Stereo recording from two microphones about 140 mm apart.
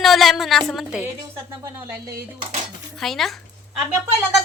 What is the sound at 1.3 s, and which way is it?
Speech, 20° right (ahead or behind).